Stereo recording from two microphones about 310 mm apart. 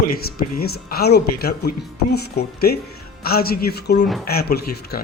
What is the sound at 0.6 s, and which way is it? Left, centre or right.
Speech, left.